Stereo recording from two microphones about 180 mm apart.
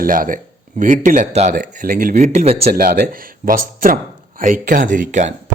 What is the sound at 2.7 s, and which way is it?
A man's voice, 55° right (ahead or behind).